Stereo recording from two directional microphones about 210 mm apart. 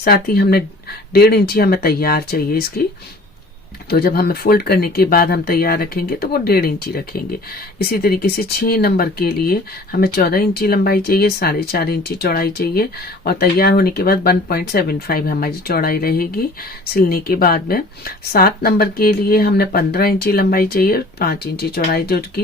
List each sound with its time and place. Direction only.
0.0 s speech: 45° left (ahead or behind)
3.8 s speech: 50° left (ahead or behind)